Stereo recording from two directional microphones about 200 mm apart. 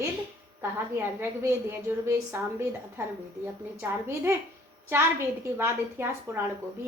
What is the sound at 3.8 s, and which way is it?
Speech, 10° right (ahead or behind).